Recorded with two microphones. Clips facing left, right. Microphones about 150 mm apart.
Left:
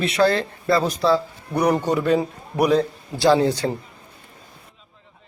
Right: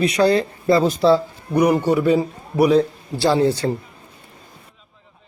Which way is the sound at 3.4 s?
15° left (ahead or behind).